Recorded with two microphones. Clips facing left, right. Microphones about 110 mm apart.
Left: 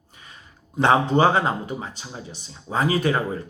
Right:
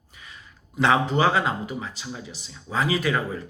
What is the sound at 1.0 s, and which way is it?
Speech, 25° left (ahead or behind).